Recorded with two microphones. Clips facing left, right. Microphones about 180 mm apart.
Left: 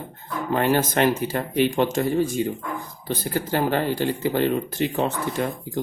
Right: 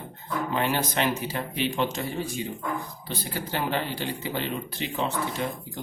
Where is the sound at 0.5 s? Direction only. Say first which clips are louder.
Left 7 dB; 45° left (ahead or behind).